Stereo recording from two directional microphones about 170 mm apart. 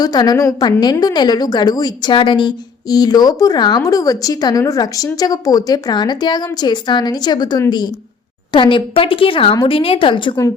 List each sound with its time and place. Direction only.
0.0 s a woman's voice: 25° left (ahead or behind)